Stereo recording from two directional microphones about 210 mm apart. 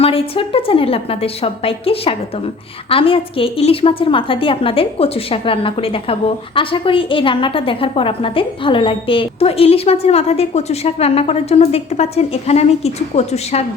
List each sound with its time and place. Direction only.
0.0 s a woman's voice: 25° left (ahead or behind)